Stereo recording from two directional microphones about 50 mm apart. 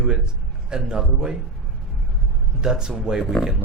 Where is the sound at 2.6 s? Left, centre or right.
Centre.